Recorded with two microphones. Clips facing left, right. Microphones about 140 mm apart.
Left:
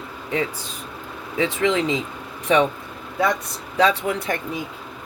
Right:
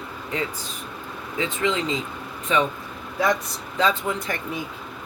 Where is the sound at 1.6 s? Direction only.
90° left.